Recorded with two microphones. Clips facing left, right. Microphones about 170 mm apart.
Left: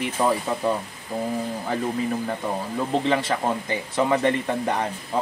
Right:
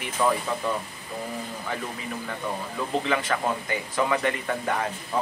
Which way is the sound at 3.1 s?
30° left (ahead or behind).